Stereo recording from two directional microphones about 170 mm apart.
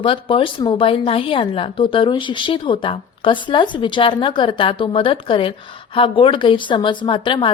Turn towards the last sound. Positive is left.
turn(degrees=30)  # may be behind; listen again after turning